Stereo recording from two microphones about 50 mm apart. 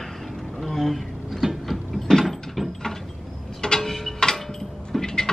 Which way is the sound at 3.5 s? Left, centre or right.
Centre.